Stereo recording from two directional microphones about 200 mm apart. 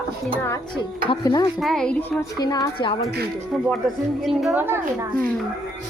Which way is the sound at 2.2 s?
20° left (ahead or behind).